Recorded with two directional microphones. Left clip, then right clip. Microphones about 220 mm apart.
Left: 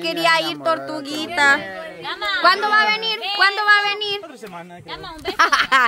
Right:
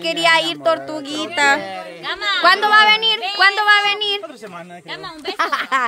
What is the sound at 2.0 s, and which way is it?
Speech, 40° right (ahead or behind).